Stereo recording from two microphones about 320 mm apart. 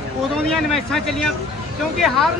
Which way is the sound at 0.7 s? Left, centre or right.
Centre.